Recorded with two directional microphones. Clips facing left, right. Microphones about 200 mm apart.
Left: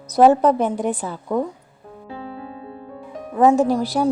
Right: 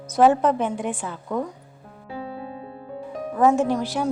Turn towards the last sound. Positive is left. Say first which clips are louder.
# left 4 dB
turn(degrees=35)  # may be behind; listen again after turning